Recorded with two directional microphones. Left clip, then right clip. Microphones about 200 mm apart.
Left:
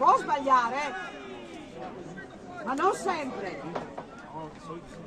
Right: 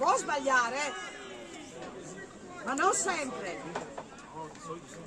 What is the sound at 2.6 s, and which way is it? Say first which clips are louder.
Speech: left 2 dB; 20° right (ahead or behind).